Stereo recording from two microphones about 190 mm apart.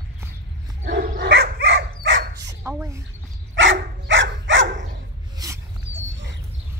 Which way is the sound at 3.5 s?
80° right.